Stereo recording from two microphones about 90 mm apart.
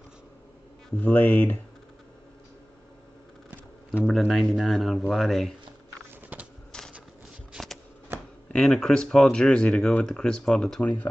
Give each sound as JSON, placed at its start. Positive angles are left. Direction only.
{"t": 1.0, "sound": "speech", "side_deg": 15}
{"t": 4.0, "sound": "speech", "side_deg": 0}
{"t": 6.3, "sound": "a sound", "side_deg": -15}
{"t": 7.5, "sound": "shuffling cards", "side_deg": 0}
{"t": 8.1, "sound": "a sound", "side_deg": -25}
{"t": 8.5, "sound": "speech", "side_deg": 5}
{"t": 10.8, "sound": "speech", "side_deg": 15}